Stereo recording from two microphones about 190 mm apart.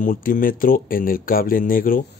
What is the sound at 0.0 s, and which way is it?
Speech, 45° left (ahead or behind).